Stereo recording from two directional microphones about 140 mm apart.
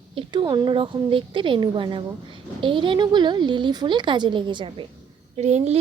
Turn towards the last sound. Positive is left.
turn(degrees=-50)  # may be behind; listen again after turning